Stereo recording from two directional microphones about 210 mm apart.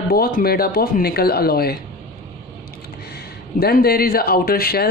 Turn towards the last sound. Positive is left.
turn(degrees=50)  # may be behind; listen again after turning